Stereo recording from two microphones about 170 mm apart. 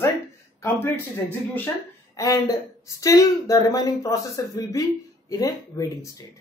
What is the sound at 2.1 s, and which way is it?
Speech, 20° left (ahead or behind).